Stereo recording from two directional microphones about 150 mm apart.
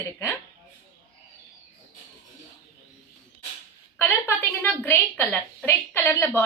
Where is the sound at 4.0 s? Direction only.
15° left (ahead or behind).